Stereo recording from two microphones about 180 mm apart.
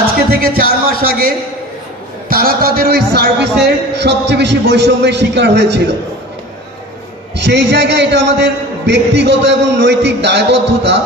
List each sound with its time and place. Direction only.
0.3 s music: 55° right (ahead or behind)
2.2 s a man's voice: 55° right (ahead or behind); by 5.9 s 70° right (ahead or behind)
7.3 s a man's voice: 70° right (ahead or behind)